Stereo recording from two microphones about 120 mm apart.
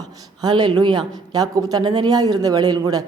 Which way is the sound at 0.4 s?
40° right (ahead or behind).